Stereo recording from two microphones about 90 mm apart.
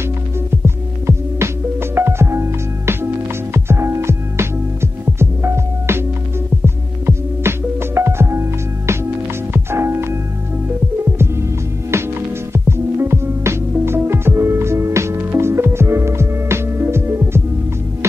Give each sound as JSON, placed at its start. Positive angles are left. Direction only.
{"t": 0.7, "sound": "music", "side_deg": -30}
{"t": 12.5, "sound": "music", "side_deg": -30}